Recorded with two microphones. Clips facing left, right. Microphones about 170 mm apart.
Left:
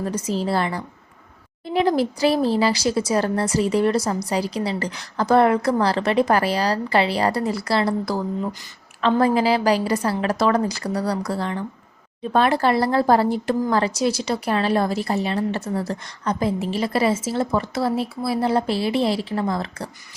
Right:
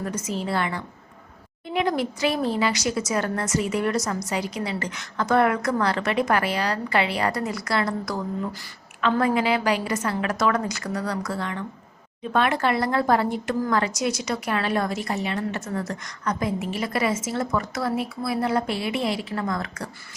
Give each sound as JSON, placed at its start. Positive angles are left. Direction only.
{"t": 0.0, "sound": "a woman's voice", "side_deg": 30}